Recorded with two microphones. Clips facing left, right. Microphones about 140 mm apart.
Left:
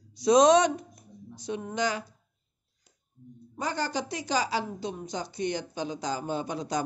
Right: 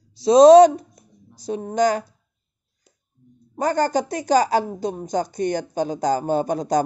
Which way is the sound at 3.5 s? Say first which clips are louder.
Right 10 dB; 45° right (ahead or behind).